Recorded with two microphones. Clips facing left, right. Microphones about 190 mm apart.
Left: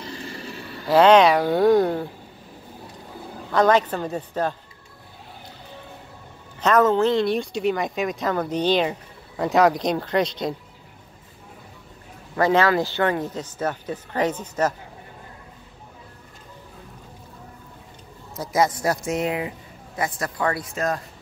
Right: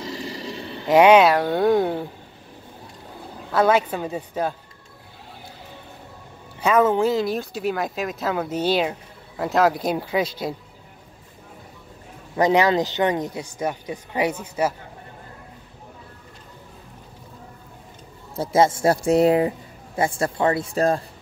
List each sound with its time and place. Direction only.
0.4 s speech: 30° right (ahead or behind); by 2.0 s 5° right (ahead or behind)
3.5 s speech: 10° right (ahead or behind)
6.6 s speech: 10° right (ahead or behind)
12.4 s speech: 15° right (ahead or behind)
18.3 s speech: 30° right (ahead or behind)